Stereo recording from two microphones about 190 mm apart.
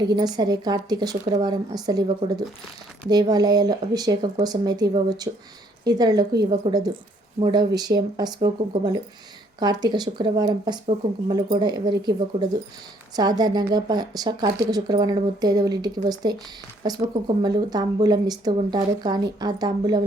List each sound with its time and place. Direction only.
0.0 s speech: 20° right (ahead or behind)